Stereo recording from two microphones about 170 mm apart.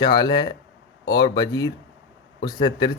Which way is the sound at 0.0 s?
25° left (ahead or behind).